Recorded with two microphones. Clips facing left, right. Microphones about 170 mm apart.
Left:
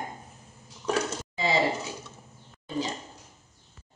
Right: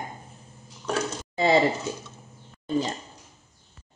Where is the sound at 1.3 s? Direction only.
55° right (ahead or behind).